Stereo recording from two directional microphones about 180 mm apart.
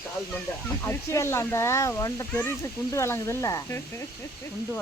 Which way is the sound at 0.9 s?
15° left (ahead or behind).